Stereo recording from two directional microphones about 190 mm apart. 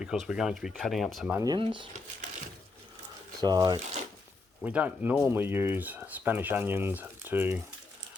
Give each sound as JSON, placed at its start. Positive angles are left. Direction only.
{"t": 0.0, "sound": "speech", "side_deg": -5}
{"t": 1.4, "sound": "speech", "side_deg": -25}
{"t": 3.4, "sound": "speech", "side_deg": -20}
{"t": 4.6, "sound": "speech", "side_deg": -10}